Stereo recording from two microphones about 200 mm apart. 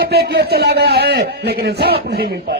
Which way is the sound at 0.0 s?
50° right (ahead or behind).